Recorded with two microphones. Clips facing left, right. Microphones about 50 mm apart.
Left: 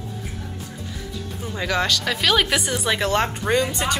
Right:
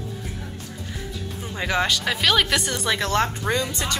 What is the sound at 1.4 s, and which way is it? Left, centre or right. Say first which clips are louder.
Speech: even; centre.